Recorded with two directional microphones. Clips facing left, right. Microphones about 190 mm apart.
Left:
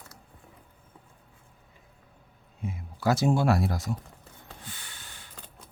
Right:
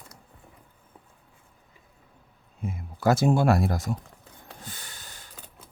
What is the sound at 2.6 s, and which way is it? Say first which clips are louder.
Speech: right 3 dB; 50° right (ahead or behind).